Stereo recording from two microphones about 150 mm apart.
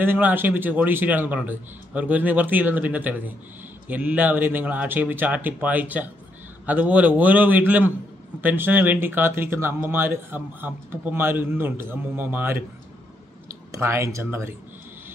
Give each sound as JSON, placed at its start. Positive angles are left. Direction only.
{"t": 0.0, "sound": "speech", "side_deg": -15}
{"t": 13.7, "sound": "speech", "side_deg": -20}